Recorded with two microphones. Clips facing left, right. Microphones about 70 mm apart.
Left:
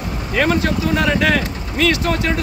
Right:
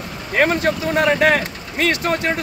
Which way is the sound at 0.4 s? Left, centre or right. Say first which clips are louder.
Even; right.